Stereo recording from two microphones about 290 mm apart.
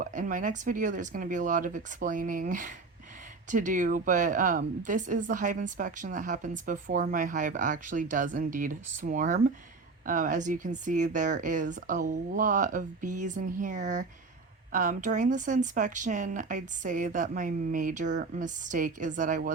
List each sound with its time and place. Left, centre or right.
0.0 s speech: right